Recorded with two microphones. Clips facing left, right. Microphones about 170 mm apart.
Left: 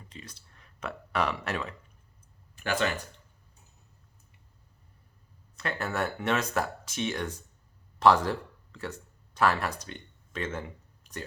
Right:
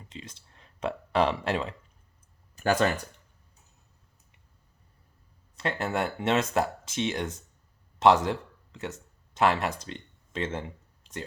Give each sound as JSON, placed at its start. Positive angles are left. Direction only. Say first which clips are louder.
{"t": 0.1, "sound": "speech", "louder": "right 5 dB", "side_deg": -25}
{"t": 2.6, "sound": "speech", "louder": "right 5 dB", "side_deg": -40}
{"t": 5.5, "sound": "speech", "louder": "right 2 dB", "side_deg": -25}